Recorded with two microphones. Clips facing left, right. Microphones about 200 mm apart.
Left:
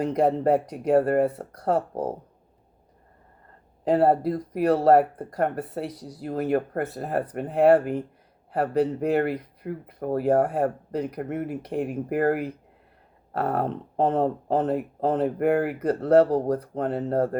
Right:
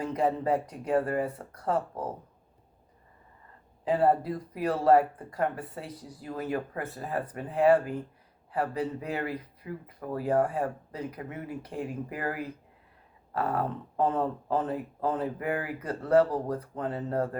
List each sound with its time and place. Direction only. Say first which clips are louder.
0.0 s speech: left 6 dB; 70° left (ahead or behind)
1.9 s speech: left 7 dB; 40° left (ahead or behind)
3.8 s speech: left 5 dB; 65° left (ahead or behind)